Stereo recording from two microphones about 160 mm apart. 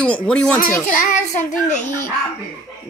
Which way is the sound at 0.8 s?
55° left (ahead or behind).